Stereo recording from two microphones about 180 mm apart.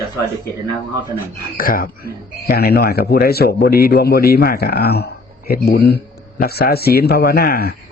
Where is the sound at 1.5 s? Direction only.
50° left (ahead or behind).